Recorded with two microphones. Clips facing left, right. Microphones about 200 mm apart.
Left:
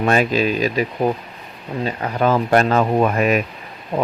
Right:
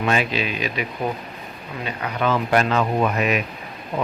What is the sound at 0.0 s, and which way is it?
Speech, 45° left (ahead or behind).